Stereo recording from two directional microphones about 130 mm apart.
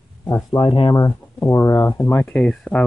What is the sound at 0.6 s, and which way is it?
Speech, 45° left (ahead or behind).